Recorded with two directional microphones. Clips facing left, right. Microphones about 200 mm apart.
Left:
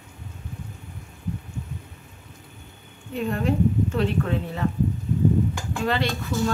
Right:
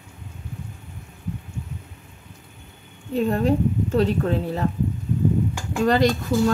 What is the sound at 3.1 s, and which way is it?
Speech, 35° right (ahead or behind).